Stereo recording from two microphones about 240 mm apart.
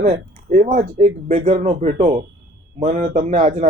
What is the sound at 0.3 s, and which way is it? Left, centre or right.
Speech, right.